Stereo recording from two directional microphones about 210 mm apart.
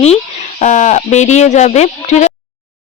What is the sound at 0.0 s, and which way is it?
Speech, 30° left (ahead or behind).